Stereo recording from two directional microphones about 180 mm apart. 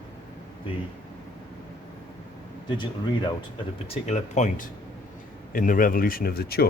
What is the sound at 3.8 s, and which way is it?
Speech, 35° left (ahead or behind).